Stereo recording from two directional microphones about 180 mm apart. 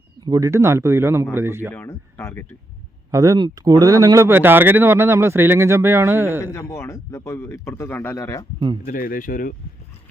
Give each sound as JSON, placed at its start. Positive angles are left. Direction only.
{"t": 0.3, "sound": "speech", "side_deg": -20}
{"t": 1.7, "sound": "speech", "side_deg": 15}
{"t": 3.1, "sound": "speech", "side_deg": -20}
{"t": 6.4, "sound": "speech", "side_deg": 20}
{"t": 8.5, "sound": "speech", "side_deg": -25}
{"t": 8.8, "sound": "speech", "side_deg": 50}